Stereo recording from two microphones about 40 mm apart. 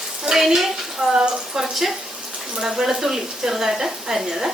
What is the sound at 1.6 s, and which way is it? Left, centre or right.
Speech, centre.